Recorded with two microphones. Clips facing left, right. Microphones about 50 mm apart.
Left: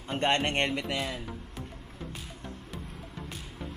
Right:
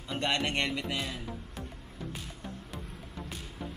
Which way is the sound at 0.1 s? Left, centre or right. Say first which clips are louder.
Left 3 dB; left.